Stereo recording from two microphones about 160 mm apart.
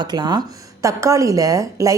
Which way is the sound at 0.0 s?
25° right (ahead or behind).